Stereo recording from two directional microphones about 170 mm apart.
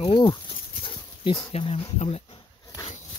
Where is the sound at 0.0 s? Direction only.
25° left (ahead or behind).